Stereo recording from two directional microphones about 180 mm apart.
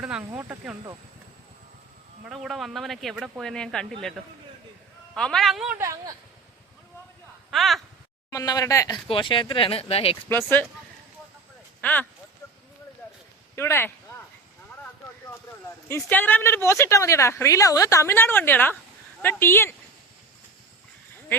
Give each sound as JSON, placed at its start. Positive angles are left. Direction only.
{"t": 0.0, "sound": "speech", "side_deg": -5}
{"t": 2.2, "sound": "speech", "side_deg": 0}
{"t": 5.1, "sound": "speech", "side_deg": 5}
{"t": 5.8, "sound": "speech", "side_deg": -20}
{"t": 7.5, "sound": "speech", "side_deg": 0}
{"t": 8.3, "sound": "speech", "side_deg": 20}
{"t": 9.0, "sound": "speech", "side_deg": 25}
{"t": 10.2, "sound": "speech", "side_deg": 10}
{"t": 11.8, "sound": "speech", "side_deg": 10}
{"t": 13.6, "sound": "speech", "side_deg": 15}
{"t": 16.0, "sound": "speech", "side_deg": 10}